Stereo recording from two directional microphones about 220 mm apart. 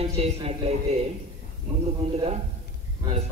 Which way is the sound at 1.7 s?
25° right (ahead or behind).